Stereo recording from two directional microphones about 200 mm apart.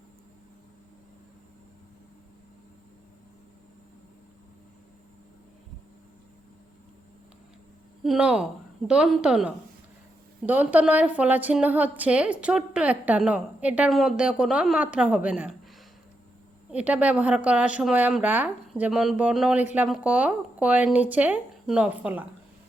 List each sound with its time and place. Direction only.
8.0 s a woman's voice: 5° right (ahead or behind)
16.7 s a woman's voice: 5° right (ahead or behind)